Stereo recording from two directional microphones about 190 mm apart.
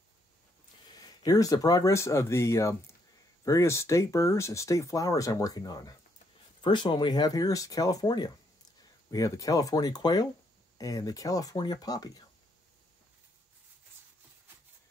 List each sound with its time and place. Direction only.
0.9 s speech: 20° left (ahead or behind)